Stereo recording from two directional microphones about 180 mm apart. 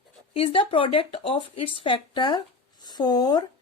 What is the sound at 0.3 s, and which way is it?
Speech, 30° left (ahead or behind).